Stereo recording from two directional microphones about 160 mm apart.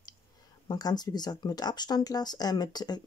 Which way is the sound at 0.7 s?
25° left (ahead or behind).